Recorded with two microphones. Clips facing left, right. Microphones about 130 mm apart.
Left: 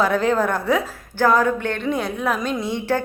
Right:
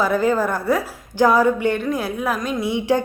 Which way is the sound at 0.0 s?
5° right (ahead or behind).